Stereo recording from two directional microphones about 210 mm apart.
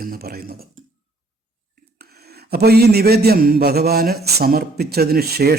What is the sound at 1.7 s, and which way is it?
Speech, 50° right (ahead or behind).